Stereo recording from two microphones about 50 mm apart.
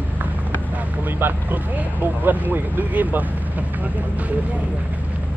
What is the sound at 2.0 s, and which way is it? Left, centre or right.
Vehicle, right.